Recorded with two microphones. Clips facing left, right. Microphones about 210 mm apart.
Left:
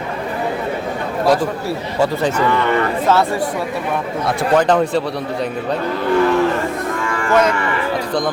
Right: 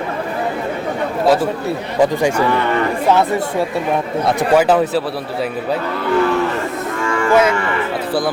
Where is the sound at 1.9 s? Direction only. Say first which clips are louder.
Right 3 dB; 15° right (ahead or behind).